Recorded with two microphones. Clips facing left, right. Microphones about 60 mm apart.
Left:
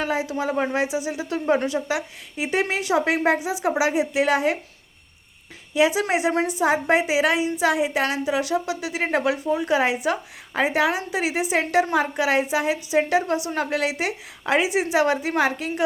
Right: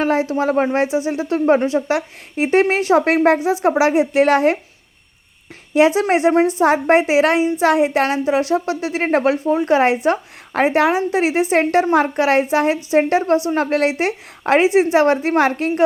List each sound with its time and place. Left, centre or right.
0.0 s a woman's voice: right
1.9 s a woman's voice: right
6.0 s speech: right
6.6 s a woman's voice: right
8.1 s a woman's voice: right